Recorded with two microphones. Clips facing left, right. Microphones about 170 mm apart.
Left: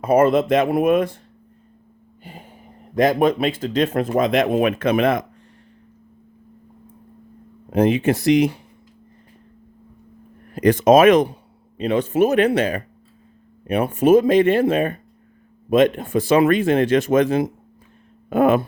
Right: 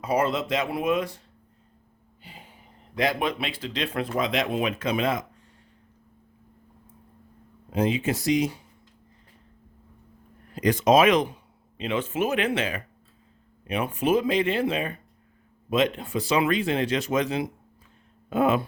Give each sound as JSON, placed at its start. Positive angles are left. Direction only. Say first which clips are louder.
{"t": 0.0, "sound": "speech", "louder": "left 9 dB", "side_deg": 50}
{"t": 2.2, "sound": "speech", "louder": "left 8 dB", "side_deg": 50}
{"t": 7.7, "sound": "speech", "louder": "left 8 dB", "side_deg": 60}
{"t": 10.5, "sound": "speech", "louder": "left 6 dB", "side_deg": 50}